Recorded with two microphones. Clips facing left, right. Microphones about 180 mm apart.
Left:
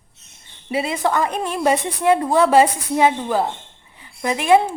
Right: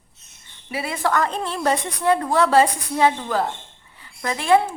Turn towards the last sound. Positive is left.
turn(degrees=15)  # may be behind; listen again after turning